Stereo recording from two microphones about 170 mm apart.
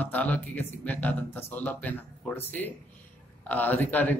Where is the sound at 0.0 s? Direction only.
10° left (ahead or behind).